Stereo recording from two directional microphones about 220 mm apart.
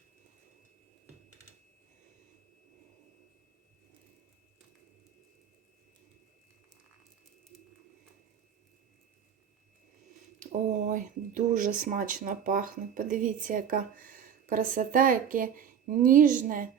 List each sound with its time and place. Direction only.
10.4 s speech: 35° right (ahead or behind)